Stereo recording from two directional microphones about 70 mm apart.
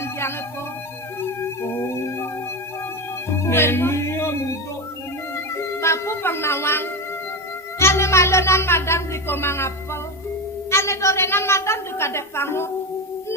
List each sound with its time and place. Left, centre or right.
0.0 s music: left
3.3 s music: left
5.5 s music: left
7.8 s a woman's voice: left